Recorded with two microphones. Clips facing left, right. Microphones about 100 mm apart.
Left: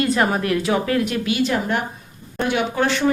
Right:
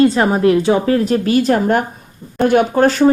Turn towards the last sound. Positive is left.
turn(degrees=-40)  # may be behind; listen again after turning